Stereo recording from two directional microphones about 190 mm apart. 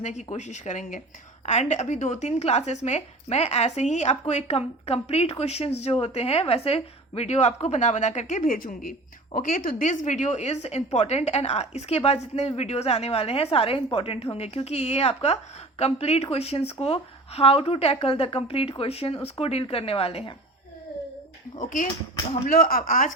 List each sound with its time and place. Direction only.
0.0 s speech: 40° left (ahead or behind)
21.6 s speech: 45° left (ahead or behind)